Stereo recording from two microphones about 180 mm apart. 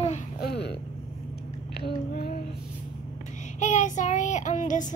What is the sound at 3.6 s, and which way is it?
Child singing, 45° left (ahead or behind).